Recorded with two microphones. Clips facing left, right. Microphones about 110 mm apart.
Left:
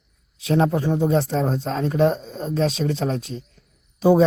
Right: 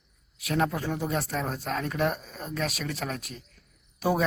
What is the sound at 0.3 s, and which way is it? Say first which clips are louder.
Speech: left 8 dB; 25° left (ahead or behind).